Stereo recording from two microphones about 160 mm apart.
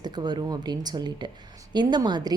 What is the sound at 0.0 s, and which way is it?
A woman's voice, 25° right (ahead or behind).